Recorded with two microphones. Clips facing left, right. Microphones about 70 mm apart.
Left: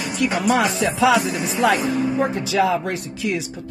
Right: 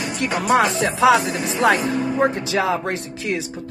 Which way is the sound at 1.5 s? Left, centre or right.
Right.